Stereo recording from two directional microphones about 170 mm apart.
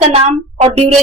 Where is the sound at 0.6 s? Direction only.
35° right (ahead or behind).